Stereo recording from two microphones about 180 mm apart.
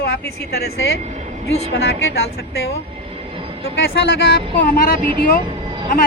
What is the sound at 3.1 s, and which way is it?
Vehicle, 30° right (ahead or behind).